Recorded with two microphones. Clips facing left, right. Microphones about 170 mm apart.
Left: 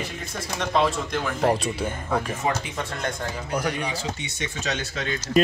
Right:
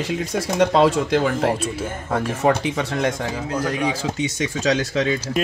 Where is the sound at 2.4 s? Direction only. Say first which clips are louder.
Right 8 dB; 85° right.